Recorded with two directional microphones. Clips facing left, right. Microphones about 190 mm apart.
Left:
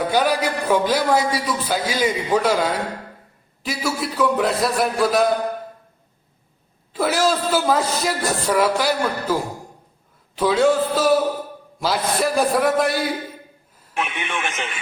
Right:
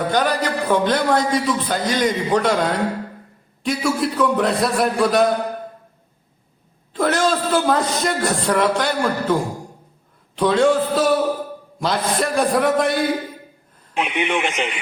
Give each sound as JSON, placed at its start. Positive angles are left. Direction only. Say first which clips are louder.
{"t": 0.1, "sound": "a man's voice", "louder": "even", "side_deg": 10}
{"t": 6.9, "sound": "a man's voice", "louder": "right 1 dB", "side_deg": 5}
{"t": 13.9, "sound": "a man's voice", "louder": "right 5 dB", "side_deg": -15}